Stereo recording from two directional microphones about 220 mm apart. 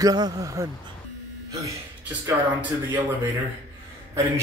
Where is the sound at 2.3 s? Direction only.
15° right (ahead or behind).